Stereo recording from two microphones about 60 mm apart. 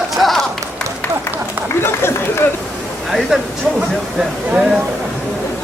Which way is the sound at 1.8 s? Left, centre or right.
Left.